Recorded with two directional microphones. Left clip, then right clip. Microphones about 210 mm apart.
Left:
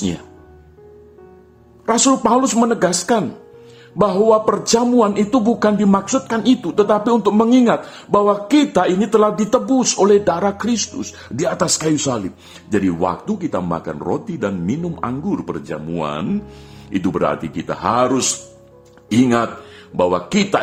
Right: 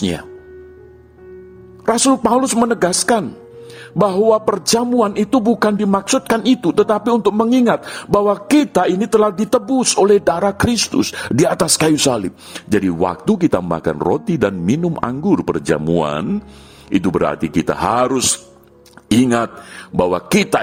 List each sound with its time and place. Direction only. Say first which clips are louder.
1.8 s a man's voice: right 1 dB; 35° right (ahead or behind)